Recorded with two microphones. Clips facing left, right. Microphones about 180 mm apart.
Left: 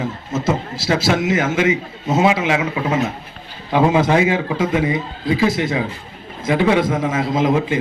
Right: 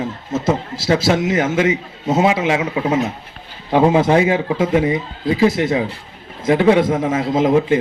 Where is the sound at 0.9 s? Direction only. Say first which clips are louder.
Right 2 dB; 40° right (ahead or behind).